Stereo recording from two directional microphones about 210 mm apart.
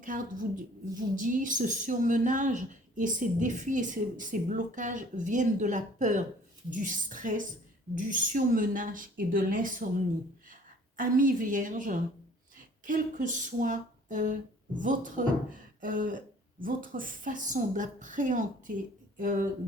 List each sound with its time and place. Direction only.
0.0 s a woman's voice: 40° right (ahead or behind)